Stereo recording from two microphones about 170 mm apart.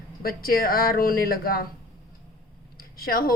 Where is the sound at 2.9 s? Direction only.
60° left (ahead or behind).